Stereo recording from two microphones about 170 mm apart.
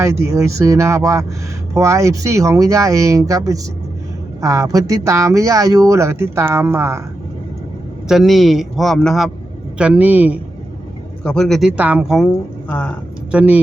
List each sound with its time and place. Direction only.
0.0 s speech: 15° right (ahead or behind)
8.0 s a man's voice: centre (ahead or behind)
11.2 s a man's voice: 5° left (ahead or behind)
13.3 s speech: 5° right (ahead or behind)